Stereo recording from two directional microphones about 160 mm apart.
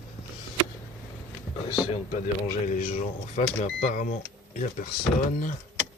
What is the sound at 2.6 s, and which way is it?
Speech, 50° left (ahead or behind).